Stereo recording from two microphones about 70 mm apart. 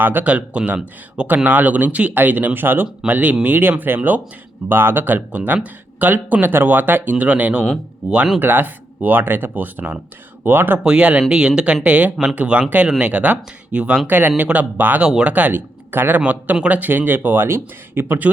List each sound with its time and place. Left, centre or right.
0.0 s speech: right
10.8 s speech: centre
15.0 s speech: centre
15.3 s speech: right